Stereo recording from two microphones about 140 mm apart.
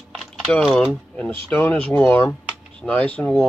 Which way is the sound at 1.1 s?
10° left (ahead or behind).